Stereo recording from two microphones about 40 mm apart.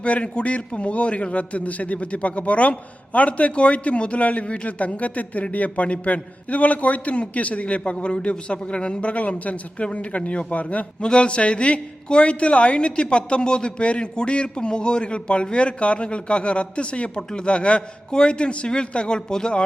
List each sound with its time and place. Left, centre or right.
0.0 s a man's voice: left
11.0 s a woman's voice: left